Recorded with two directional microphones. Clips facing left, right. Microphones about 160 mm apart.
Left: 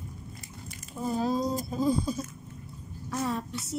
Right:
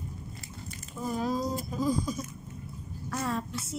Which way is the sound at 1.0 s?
30° left (ahead or behind).